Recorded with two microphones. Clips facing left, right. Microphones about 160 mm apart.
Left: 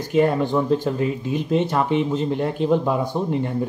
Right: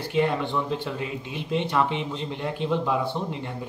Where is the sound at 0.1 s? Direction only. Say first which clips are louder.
Left 6 dB; 45° left (ahead or behind).